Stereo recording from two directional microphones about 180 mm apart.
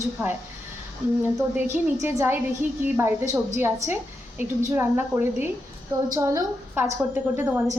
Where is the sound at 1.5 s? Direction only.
10° right (ahead or behind).